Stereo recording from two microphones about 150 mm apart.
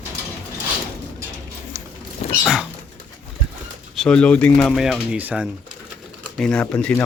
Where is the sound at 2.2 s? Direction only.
45° left (ahead or behind).